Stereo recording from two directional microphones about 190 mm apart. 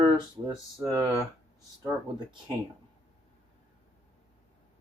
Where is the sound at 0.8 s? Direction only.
15° right (ahead or behind).